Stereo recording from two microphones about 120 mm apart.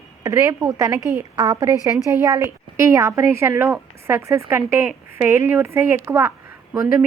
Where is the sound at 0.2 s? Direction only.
25° right (ahead or behind).